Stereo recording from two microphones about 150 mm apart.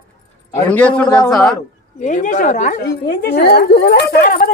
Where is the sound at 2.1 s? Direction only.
60° left (ahead or behind).